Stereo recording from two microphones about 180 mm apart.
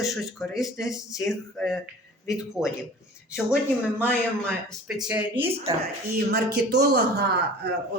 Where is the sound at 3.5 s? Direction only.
10° left (ahead or behind).